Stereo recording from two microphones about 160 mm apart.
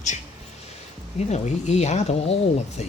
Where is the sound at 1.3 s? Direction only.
45° left (ahead or behind).